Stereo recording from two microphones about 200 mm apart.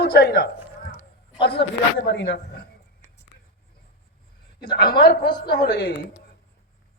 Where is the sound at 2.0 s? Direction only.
60° left (ahead or behind).